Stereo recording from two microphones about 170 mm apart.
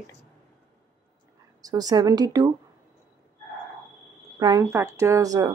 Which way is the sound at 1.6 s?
20° right (ahead or behind).